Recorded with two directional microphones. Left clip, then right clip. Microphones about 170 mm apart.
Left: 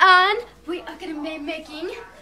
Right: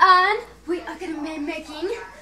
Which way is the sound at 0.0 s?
25° left (ahead or behind).